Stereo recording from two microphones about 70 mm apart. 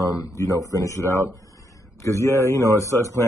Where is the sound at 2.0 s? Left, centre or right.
Left.